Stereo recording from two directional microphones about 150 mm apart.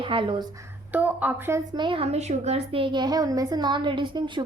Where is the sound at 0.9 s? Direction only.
10° right (ahead or behind).